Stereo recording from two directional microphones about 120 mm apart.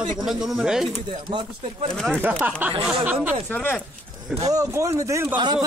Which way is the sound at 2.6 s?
15° right (ahead or behind).